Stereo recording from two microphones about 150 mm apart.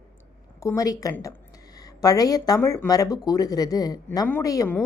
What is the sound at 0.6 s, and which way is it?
A woman's voice, 20° left (ahead or behind).